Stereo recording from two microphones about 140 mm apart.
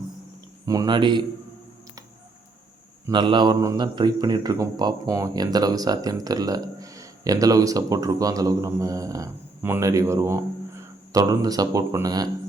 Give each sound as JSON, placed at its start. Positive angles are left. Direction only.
{"t": 0.6, "sound": "speech", "side_deg": -25}
{"t": 3.1, "sound": "speech", "side_deg": -35}